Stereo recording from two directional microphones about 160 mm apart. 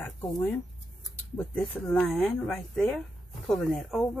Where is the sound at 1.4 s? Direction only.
15° left (ahead or behind).